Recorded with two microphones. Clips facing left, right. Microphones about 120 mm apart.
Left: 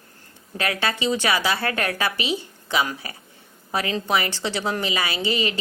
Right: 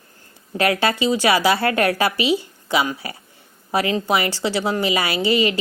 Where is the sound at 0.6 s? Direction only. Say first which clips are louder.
Right 6 dB; 35° right (ahead or behind).